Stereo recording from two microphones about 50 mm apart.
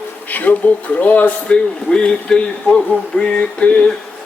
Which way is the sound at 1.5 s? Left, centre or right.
Centre.